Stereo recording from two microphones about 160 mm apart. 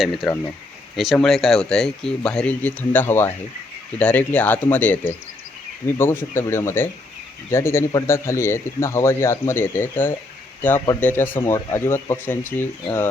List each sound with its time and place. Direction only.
0.0 s a man's voice: centre (ahead or behind)